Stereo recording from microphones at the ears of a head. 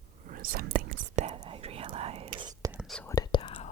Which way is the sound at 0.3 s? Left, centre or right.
Right.